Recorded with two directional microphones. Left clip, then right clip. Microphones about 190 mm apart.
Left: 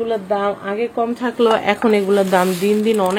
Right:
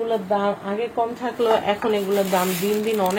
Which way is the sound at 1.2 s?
50° left (ahead or behind).